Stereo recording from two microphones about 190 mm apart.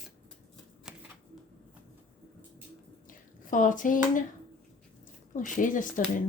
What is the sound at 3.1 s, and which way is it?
Hands, 45° left (ahead or behind).